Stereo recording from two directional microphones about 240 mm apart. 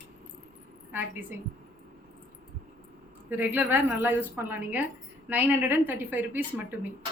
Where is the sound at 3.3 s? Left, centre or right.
Centre.